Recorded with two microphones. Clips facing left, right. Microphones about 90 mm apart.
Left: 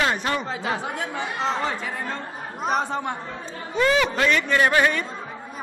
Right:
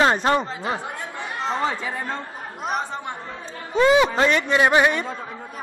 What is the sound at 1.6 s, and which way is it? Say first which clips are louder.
Speech: right 2 dB; 25° right (ahead or behind).